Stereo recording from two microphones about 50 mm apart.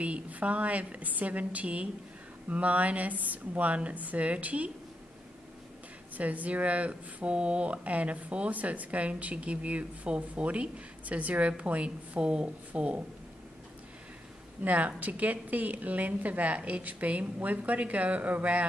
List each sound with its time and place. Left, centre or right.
0.0 s speech: right
6.1 s speech: right
14.6 s a woman's voice: right